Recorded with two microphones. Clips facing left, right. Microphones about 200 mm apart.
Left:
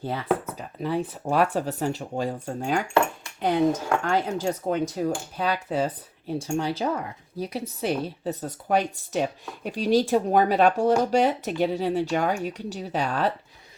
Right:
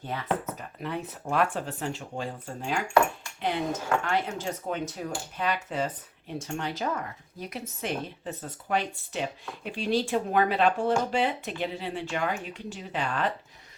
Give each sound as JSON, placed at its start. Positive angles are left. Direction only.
{"t": 0.8, "sound": "speech", "side_deg": 30}